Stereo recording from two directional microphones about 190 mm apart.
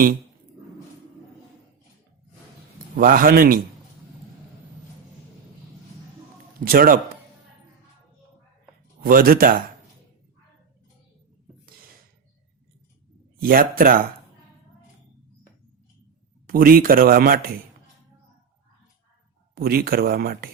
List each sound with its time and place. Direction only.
2.9 s speech: 45° right (ahead or behind)
6.7 s speech: 50° right (ahead or behind)
9.0 s speech: 50° right (ahead or behind)
13.4 s speech: 50° right (ahead or behind)
16.5 s speech: 50° right (ahead or behind)
19.5 s speech: 55° right (ahead or behind)